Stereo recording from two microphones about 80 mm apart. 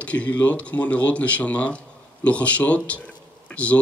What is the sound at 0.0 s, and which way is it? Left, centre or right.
A man's voice, centre.